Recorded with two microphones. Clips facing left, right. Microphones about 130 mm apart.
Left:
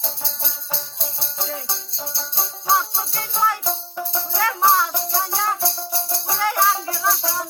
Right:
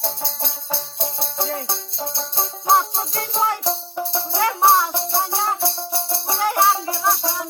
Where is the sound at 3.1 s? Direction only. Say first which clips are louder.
Even; 40° right (ahead or behind).